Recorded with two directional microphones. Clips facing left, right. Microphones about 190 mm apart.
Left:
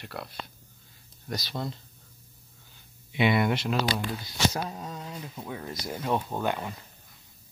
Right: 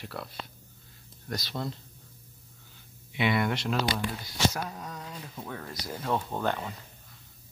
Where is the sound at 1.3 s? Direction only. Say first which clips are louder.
Left 1 dB; centre (ahead or behind).